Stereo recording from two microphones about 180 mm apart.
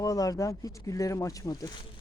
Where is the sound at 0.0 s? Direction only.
20° left (ahead or behind).